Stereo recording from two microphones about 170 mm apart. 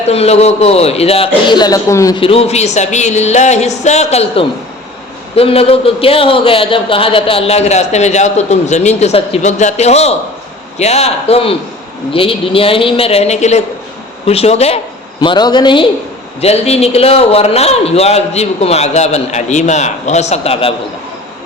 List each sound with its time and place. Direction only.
0.1 s a man's voice: 35° left (ahead or behind); by 2.2 s 20° left (ahead or behind)
2.2 s a man's voice: 35° left (ahead or behind)
15.2 s a man's voice: 25° left (ahead or behind)
16.4 s a man's voice: 40° left (ahead or behind)